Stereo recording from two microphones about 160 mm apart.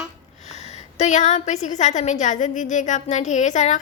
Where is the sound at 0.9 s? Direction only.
45° left (ahead or behind).